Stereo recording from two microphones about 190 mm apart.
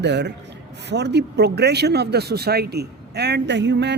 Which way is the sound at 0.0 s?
65° right (ahead or behind).